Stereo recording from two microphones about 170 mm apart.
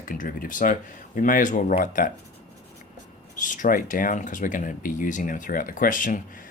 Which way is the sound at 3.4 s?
50° left (ahead or behind).